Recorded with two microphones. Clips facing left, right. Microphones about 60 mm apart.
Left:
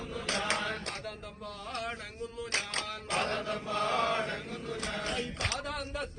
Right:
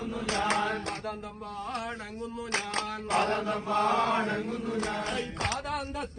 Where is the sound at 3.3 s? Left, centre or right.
Centre.